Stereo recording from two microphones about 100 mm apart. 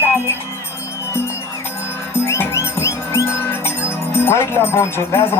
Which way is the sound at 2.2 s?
25° left (ahead or behind).